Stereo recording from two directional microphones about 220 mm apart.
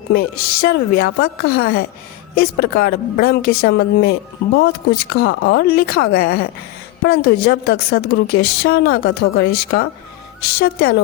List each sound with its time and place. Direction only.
0.1 s speech: 40° left (ahead or behind)